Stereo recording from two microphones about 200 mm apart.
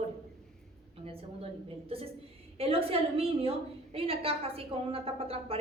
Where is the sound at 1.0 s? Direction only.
30° right (ahead or behind).